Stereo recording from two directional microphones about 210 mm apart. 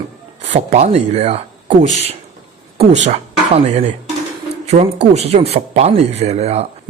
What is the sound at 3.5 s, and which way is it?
Speech, 30° right (ahead or behind).